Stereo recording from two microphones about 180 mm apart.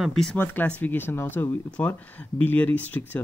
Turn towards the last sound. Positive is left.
turn(degrees=10)  # may be behind; listen again after turning